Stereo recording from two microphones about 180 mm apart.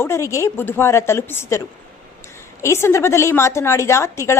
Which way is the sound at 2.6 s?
15° left (ahead or behind).